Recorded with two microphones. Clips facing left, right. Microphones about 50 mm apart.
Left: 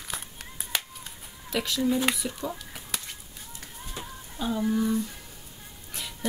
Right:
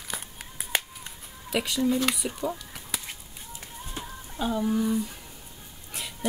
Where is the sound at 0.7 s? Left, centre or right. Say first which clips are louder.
Right 3 dB; right.